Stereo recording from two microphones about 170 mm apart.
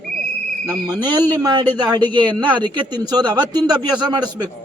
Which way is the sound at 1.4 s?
25° right (ahead or behind).